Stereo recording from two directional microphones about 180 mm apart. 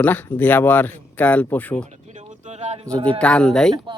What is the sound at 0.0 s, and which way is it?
Speech, 10° left (ahead or behind).